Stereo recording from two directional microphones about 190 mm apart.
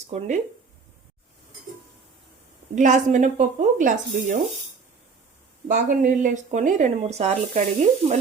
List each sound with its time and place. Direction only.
0.1 s speech: 40° right (ahead or behind)
2.7 s speech: 40° right (ahead or behind)
5.6 s speech: 40° right (ahead or behind)